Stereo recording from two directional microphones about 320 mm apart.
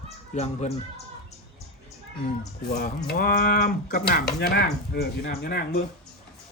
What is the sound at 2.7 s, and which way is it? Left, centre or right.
Speech, left.